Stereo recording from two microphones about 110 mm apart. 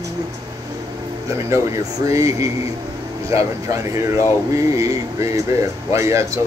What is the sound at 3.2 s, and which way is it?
Music, 30° right (ahead or behind).